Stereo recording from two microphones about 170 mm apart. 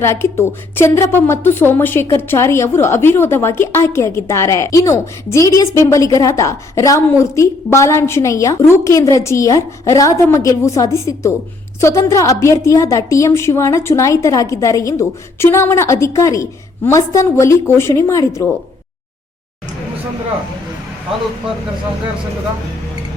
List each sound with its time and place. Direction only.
0.0 s a woman's voice: 15° left (ahead or behind)